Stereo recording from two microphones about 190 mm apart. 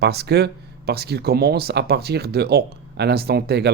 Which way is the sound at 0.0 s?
60° right (ahead or behind).